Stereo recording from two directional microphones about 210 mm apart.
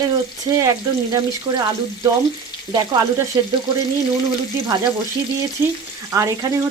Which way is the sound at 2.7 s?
15° right (ahead or behind).